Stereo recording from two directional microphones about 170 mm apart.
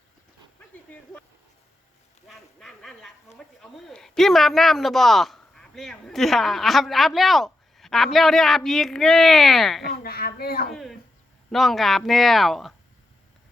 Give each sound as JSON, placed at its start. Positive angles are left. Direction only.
{"t": 2.2, "sound": "a man's voice", "side_deg": 0}
{"t": 9.9, "sound": "speech", "side_deg": 65}
{"t": 10.7, "sound": "a man's voice", "side_deg": 0}